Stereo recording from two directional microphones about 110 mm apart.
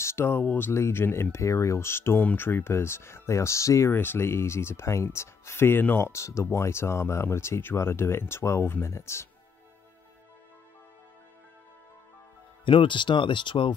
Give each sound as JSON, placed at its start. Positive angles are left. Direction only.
{"t": 0.0, "sound": "speech", "side_deg": 20}
{"t": 12.6, "sound": "speech", "side_deg": 50}